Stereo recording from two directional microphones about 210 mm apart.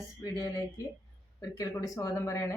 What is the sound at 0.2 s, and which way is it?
Speech, 15° left (ahead or behind).